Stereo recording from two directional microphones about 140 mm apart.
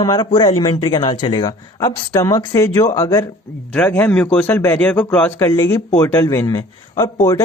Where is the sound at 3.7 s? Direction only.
10° left (ahead or behind).